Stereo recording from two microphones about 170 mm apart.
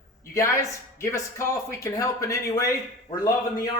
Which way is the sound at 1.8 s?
20° left (ahead or behind).